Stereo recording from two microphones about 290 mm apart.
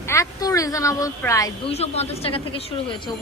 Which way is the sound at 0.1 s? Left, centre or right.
Centre.